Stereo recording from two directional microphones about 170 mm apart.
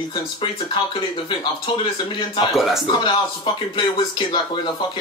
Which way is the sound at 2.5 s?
Centre (ahead or behind).